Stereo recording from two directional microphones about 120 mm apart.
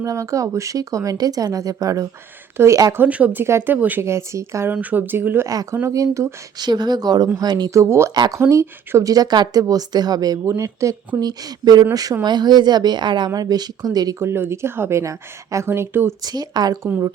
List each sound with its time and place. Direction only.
0.0 s a woman's voice: 25° right (ahead or behind)
3.0 s a woman's voice: 10° right (ahead or behind)
4.7 s a woman's voice: 10° right (ahead or behind)
16.2 s speech: 35° right (ahead or behind)